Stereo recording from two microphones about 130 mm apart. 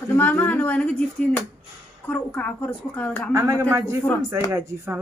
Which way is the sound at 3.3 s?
25° right (ahead or behind).